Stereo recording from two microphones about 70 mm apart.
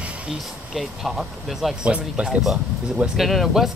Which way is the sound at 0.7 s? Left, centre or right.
Centre.